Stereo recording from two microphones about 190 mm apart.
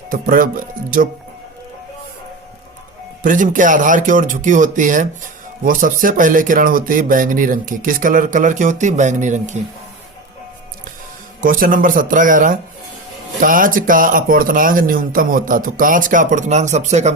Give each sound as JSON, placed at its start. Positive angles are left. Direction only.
{"t": 0.1, "sound": "speech", "side_deg": -45}
{"t": 3.2, "sound": "speech", "side_deg": -45}
{"t": 11.3, "sound": "speech", "side_deg": -45}